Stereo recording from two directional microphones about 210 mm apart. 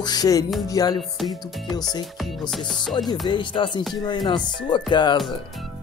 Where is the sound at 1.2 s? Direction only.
Centre (ahead or behind).